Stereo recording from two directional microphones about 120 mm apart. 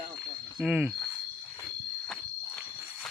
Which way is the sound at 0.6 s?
10° right (ahead or behind).